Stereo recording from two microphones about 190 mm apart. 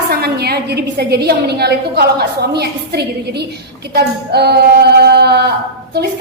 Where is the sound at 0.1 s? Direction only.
55° right (ahead or behind).